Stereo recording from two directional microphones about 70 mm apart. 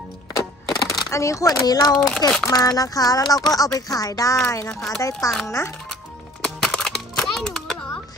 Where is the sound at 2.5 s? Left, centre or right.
Left.